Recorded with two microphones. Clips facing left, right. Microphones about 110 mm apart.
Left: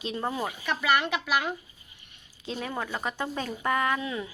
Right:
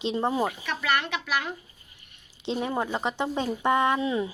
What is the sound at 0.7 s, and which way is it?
Speech, 5° left (ahead or behind).